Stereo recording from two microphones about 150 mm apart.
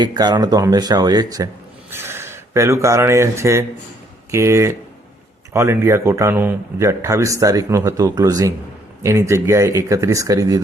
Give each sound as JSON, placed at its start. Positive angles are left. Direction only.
{"t": 0.0, "sound": "speech", "side_deg": -30}